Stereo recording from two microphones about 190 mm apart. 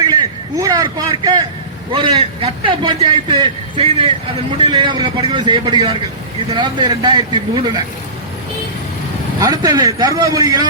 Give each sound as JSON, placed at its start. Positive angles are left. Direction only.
{"t": 0.0, "sound": "vehicle", "side_deg": -20}
{"t": 1.9, "sound": "a man's voice", "side_deg": -25}
{"t": 9.4, "sound": "a man's voice", "side_deg": -20}